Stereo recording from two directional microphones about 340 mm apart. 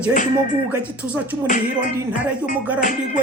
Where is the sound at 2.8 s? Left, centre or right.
Left.